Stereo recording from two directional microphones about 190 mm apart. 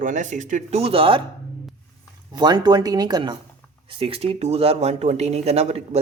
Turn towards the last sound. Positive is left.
turn(degrees=-35)  # may be behind; listen again after turning